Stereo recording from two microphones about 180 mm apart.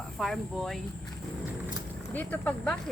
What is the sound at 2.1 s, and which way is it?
Speech, 10° left (ahead or behind).